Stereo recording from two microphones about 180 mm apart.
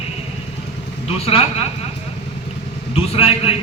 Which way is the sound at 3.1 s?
35° left (ahead or behind).